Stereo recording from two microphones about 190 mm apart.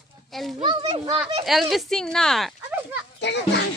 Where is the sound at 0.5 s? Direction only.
25° right (ahead or behind).